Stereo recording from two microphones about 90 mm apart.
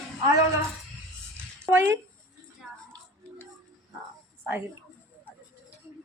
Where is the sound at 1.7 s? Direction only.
30° right (ahead or behind).